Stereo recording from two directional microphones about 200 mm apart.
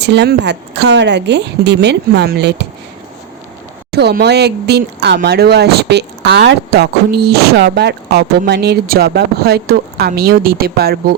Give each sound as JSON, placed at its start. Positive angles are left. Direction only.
{"t": 0.0, "sound": "speech", "side_deg": -55}
{"t": 3.9, "sound": "speech", "side_deg": -55}